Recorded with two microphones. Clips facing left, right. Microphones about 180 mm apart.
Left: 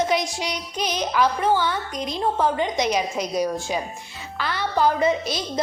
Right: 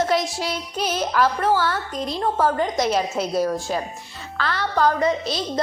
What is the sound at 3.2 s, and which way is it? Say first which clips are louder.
Speech: right 2 dB; 15° left (ahead or behind).